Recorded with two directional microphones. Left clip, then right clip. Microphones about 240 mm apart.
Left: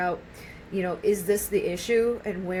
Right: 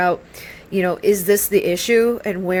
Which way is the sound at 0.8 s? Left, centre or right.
Right.